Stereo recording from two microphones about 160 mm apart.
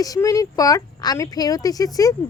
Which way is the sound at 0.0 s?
20° left (ahead or behind).